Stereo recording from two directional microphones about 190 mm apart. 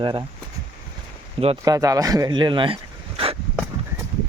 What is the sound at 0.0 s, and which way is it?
Speech, 25° right (ahead or behind).